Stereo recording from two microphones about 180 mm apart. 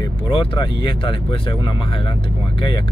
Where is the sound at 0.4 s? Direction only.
25° left (ahead or behind).